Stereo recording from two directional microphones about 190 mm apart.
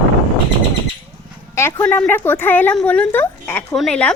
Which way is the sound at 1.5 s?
10° left (ahead or behind).